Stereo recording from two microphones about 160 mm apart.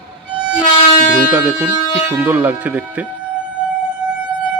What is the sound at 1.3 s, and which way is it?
Speech, 10° right (ahead or behind).